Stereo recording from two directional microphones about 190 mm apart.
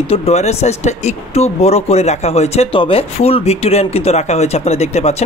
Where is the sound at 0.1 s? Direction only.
35° left (ahead or behind).